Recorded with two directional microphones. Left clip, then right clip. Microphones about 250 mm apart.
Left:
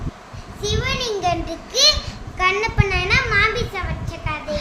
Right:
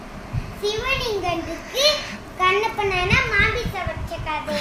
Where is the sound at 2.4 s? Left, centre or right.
Centre.